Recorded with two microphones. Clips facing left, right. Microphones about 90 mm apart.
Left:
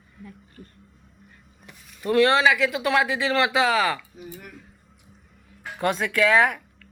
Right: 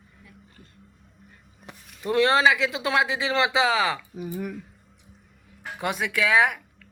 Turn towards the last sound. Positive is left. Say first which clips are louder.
# left 1 dB
turn(degrees=-10)  # may be behind; listen again after turning